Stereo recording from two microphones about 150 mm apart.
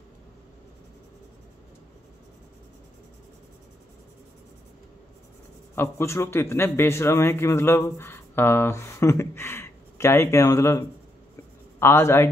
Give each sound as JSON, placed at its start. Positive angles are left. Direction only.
{"t": 5.8, "sound": "a man's voice", "side_deg": 15}